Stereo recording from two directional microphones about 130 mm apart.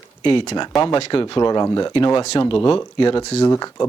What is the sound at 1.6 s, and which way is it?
Speech, 25° left (ahead or behind).